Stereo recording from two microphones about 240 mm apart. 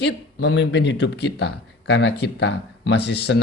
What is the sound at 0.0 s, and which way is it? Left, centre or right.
Speech, left.